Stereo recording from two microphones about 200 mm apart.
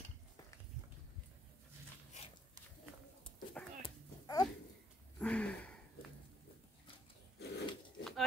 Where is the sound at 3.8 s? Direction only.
20° left (ahead or behind).